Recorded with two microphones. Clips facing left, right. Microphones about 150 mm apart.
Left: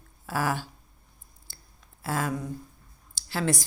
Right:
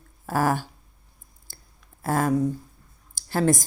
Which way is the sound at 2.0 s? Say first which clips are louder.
Right 8 dB; 50° right (ahead or behind).